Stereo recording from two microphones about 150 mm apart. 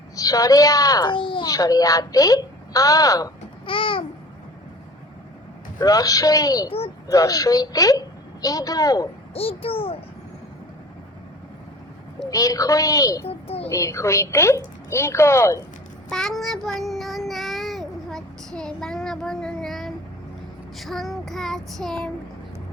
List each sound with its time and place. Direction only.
0.2 s a woman's voice: 25° left (ahead or behind)
3.7 s a child's voice: 35° left (ahead or behind)
5.8 s a woman's voice: 25° left (ahead or behind)
9.3 s a child's voice: 40° left (ahead or behind)
12.3 s a woman's voice: 20° left (ahead or behind)
13.2 s a sound: 40° left (ahead or behind)
13.7 s a woman's voice: 20° left (ahead or behind)
16.0 s child singing: 5° left (ahead or behind)